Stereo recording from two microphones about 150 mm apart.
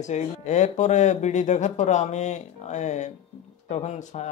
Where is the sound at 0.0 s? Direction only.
50° left (ahead or behind).